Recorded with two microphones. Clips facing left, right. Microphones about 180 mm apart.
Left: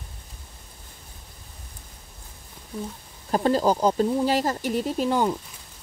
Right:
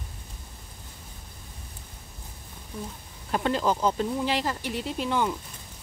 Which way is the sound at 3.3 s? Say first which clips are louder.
Left 4 dB; 35° left (ahead or behind).